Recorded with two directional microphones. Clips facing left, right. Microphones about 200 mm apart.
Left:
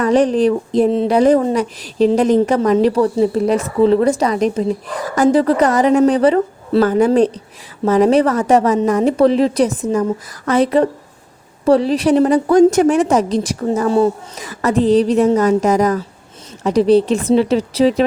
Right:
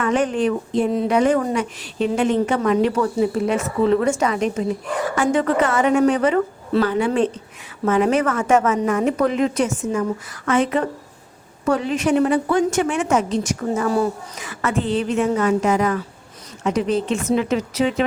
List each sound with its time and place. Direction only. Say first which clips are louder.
0.0 s speech: left 6 dB; 35° left (ahead or behind)